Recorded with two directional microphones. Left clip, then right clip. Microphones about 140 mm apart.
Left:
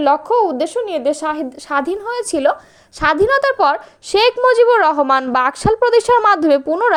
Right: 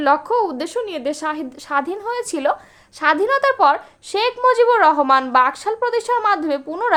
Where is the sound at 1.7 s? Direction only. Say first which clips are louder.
Left 2 dB; 30° left (ahead or behind).